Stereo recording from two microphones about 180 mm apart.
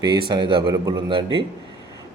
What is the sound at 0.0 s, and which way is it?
Speech, 25° right (ahead or behind).